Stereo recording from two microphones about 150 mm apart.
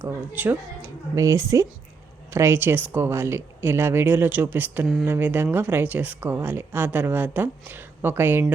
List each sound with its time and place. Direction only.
0.0 s speech: 15° right (ahead or behind)